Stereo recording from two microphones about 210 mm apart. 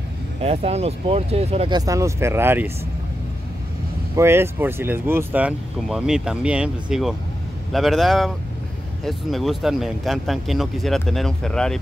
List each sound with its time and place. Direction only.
0.4 s speech: 30° right (ahead or behind); by 2.7 s 10° right (ahead or behind)
4.1 s speech: 10° right (ahead or behind)